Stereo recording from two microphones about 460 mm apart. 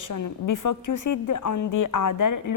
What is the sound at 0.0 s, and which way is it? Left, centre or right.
A woman's voice, left.